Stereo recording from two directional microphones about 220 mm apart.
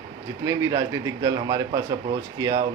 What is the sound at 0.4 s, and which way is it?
A man's voice, 15° right (ahead or behind).